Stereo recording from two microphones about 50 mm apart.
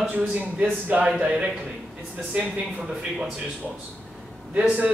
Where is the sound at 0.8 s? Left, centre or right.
Right.